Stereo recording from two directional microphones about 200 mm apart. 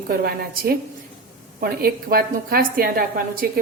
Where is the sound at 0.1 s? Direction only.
50° right (ahead or behind).